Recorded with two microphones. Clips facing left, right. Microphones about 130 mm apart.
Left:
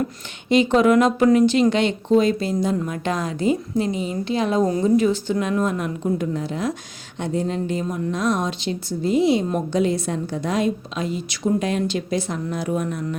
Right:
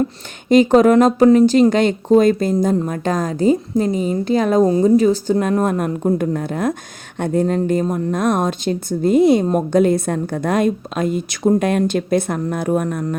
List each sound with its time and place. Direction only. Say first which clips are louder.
0.4 s a woman's voice: right 5 dB; 45° right (ahead or behind)
4.6 s a woman's voice: right 4 dB; 35° right (ahead or behind); by 13.1 s 50° right (ahead or behind)